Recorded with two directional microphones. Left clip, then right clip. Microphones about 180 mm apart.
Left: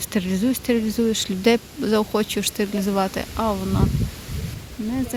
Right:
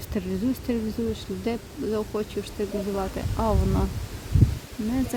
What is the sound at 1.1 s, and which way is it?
Speech, 25° left (ahead or behind).